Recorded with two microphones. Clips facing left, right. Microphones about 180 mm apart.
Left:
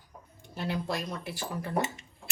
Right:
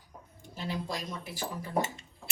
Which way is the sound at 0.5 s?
65° left (ahead or behind).